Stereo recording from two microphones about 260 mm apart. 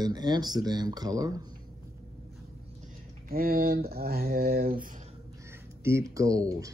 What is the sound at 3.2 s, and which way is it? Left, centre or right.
Speech, right.